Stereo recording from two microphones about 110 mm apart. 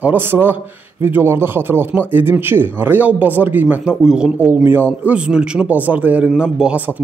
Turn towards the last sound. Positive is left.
turn(degrees=-10)  # may be behind; listen again after turning